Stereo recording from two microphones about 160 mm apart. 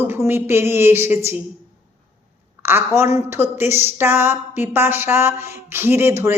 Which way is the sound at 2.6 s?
15° right (ahead or behind).